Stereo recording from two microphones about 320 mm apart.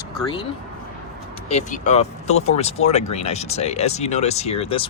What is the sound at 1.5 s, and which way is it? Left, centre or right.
Speech, left.